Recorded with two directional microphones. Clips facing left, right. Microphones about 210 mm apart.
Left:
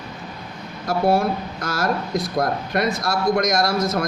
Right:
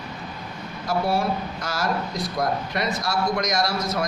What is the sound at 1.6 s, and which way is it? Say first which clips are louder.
A man's voice: left 5 dB; 50° left (ahead or behind).